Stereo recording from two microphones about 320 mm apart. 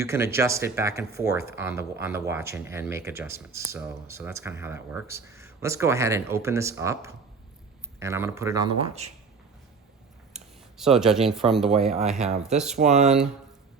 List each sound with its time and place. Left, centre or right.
0.0 s speech: centre
10.3 s speech: centre
12.7 s speech: right
13.1 s speech: centre